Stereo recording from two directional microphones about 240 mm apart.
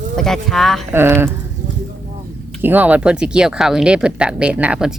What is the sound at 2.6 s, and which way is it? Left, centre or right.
Speech, centre.